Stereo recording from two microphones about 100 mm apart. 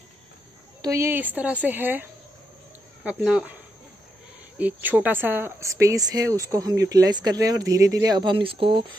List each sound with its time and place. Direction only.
0.8 s a woman's voice: 30° right (ahead or behind); by 3.5 s 10° right (ahead or behind)
4.6 s speech: 15° right (ahead or behind)
5.6 s speech: 30° right (ahead or behind)
8.3 s speech: 55° right (ahead or behind)